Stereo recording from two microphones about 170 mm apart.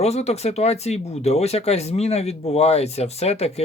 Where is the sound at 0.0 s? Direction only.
40° left (ahead or behind).